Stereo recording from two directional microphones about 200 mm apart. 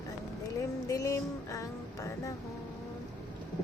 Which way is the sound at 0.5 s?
15° left (ahead or behind).